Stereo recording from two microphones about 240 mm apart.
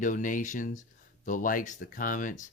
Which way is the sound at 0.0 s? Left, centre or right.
Left.